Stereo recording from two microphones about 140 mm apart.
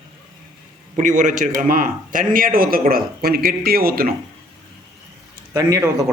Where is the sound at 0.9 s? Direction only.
65° right (ahead or behind); by 4.1 s 90° right.